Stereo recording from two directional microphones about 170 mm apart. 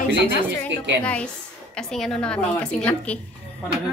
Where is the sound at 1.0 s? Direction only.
5° left (ahead or behind).